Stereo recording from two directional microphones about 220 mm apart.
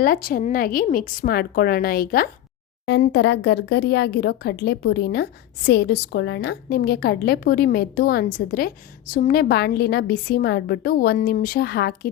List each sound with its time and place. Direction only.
0.0 s a woman's voice: 40° left (ahead or behind)